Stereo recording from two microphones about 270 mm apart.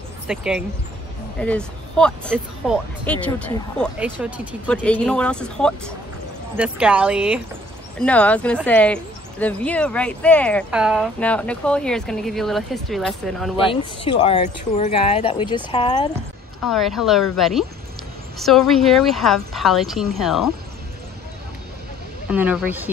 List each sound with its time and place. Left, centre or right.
0.3 s speech: centre
13.7 s speech: centre
16.6 s speech: centre
22.3 s speech: centre